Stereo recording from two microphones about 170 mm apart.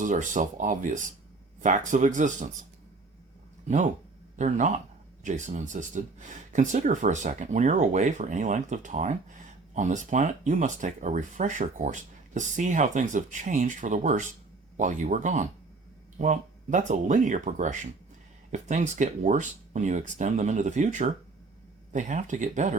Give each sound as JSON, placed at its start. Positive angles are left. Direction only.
{"t": 0.0, "sound": "speech", "side_deg": -45}
{"t": 4.4, "sound": "speech", "side_deg": -45}